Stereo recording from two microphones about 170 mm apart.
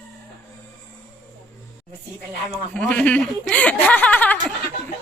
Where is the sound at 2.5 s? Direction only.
5° left (ahead or behind).